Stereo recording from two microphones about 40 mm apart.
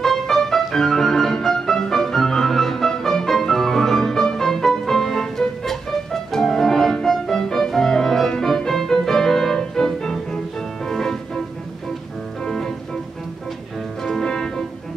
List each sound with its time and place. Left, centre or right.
0.0 s music: centre
12.4 s music: centre
14.0 s music: centre